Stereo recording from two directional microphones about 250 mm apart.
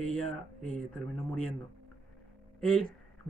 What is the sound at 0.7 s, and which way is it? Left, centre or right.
Speech, centre.